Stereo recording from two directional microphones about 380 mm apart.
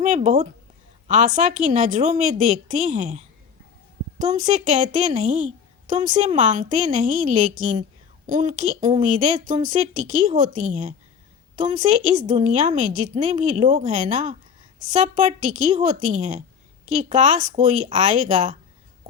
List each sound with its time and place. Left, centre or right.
0.0 s a woman's voice: centre